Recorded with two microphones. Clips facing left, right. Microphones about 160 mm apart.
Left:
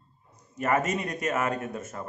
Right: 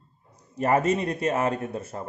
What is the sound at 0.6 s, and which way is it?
Speech, 30° right (ahead or behind).